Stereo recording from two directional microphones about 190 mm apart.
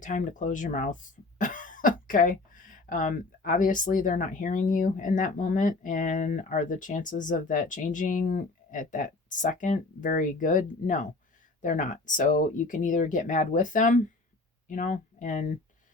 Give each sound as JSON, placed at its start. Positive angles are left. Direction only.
{"t": 0.0, "sound": "speech", "side_deg": 40}